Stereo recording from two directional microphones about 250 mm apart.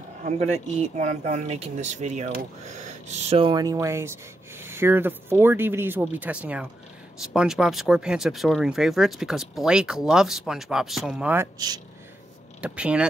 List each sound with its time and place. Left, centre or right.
0.2 s speech: right
12.6 s speech: centre